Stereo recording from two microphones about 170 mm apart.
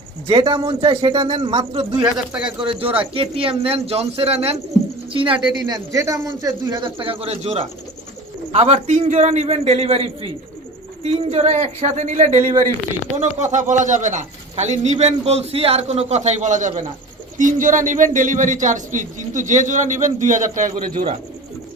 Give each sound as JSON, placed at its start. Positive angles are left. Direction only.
{"t": 0.3, "sound": "a man's voice", "side_deg": -30}
{"t": 2.1, "sound": "speech", "side_deg": -5}
{"t": 2.6, "sound": "a man's voice", "side_deg": -30}